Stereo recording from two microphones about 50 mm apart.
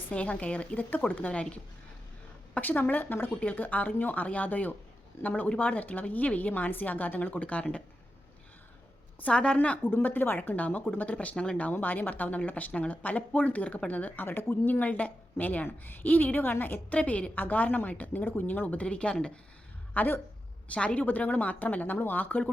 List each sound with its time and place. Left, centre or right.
0.1 s a woman's voice: left
1.3 s a woman's voice: left
2.6 s a woman's voice: left
9.2 s a woman's voice: centre
9.6 s a woman's voice: left
9.8 s a woman's voice: left
11.7 s a woman's voice: left
16.9 s a woman's voice: left
17.3 s a woman's voice: left
19.9 s speech: left
20.7 s a woman's voice: left
21.0 s a woman's voice: left